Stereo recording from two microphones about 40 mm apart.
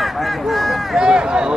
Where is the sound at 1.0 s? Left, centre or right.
Right.